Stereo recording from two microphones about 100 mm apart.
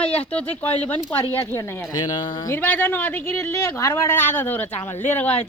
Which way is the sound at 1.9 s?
40° left (ahead or behind).